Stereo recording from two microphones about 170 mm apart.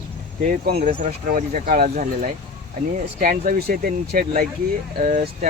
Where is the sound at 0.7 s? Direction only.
65° right (ahead or behind).